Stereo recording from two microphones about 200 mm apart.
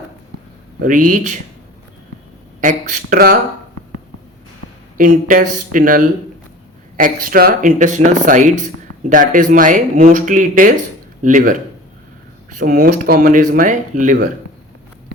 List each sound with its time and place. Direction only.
0.8 s speech: 40° right (ahead or behind)
2.6 s speech: 40° right (ahead or behind)
4.9 s speech: 40° right (ahead or behind)